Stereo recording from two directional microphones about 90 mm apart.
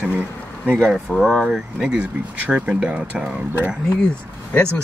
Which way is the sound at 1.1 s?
Centre (ahead or behind).